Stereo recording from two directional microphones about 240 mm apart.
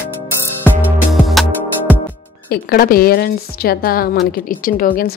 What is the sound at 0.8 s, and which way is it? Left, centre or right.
Music, centre.